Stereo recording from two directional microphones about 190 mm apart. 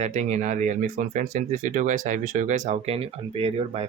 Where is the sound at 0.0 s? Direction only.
35° right (ahead or behind).